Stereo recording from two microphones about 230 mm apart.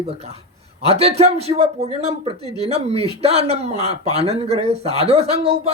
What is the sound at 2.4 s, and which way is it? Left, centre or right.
Speech, centre.